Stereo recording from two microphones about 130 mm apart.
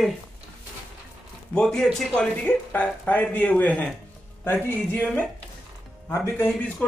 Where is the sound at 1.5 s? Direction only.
5° left (ahead or behind).